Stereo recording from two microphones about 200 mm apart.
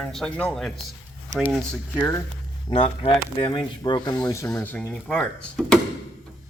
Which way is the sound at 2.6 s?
25° left (ahead or behind).